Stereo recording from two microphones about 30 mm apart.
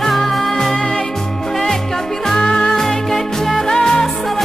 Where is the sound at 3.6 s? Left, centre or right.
Left.